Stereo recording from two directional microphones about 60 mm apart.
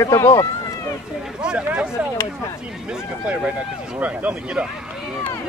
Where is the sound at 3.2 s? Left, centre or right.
Right.